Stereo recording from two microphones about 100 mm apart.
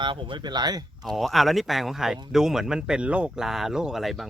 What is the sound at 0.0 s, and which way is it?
Speech, 55° right (ahead or behind).